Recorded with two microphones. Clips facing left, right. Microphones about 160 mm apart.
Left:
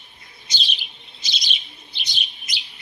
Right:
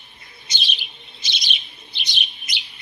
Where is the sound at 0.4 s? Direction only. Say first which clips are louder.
Right 1 dB; 60° right (ahead or behind).